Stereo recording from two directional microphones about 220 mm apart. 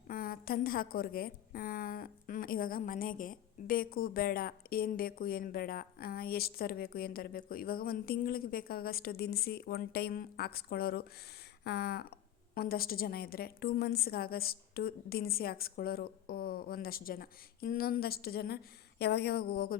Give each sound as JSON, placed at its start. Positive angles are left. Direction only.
{"t": 0.1, "sound": "a woman's voice", "side_deg": 40}